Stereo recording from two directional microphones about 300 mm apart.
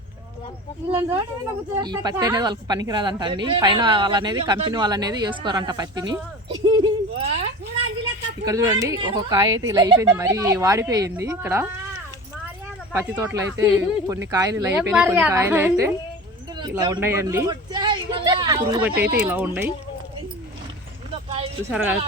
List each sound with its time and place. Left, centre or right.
1.8 s a woman's voice: centre
8.4 s a woman's voice: centre
12.9 s a woman's voice: centre
21.2 s a sound: right
21.7 s speech: centre